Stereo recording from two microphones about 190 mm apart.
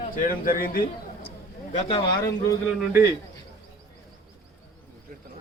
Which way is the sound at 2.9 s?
15° right (ahead or behind).